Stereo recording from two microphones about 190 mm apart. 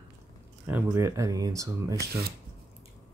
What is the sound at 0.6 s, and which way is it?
Speech, 10° right (ahead or behind).